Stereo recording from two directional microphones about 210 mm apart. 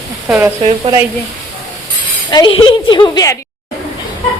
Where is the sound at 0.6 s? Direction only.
25° right (ahead or behind).